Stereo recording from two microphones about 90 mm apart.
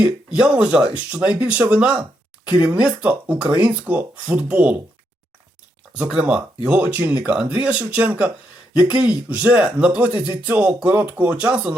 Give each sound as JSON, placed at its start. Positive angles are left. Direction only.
{"t": 0.0, "sound": "speech", "side_deg": -10}
{"t": 6.0, "sound": "speech", "side_deg": -15}